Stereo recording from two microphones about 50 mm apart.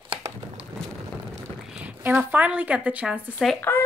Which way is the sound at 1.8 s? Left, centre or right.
Right.